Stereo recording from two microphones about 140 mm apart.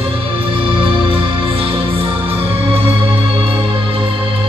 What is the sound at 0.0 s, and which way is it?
Music, 40° right (ahead or behind).